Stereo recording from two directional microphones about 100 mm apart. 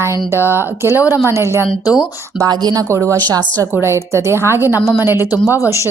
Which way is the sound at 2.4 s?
45° right (ahead or behind).